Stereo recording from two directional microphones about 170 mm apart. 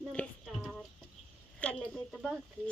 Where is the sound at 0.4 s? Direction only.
Centre (ahead or behind).